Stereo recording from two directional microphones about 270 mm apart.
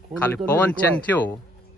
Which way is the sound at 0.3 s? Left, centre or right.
Centre.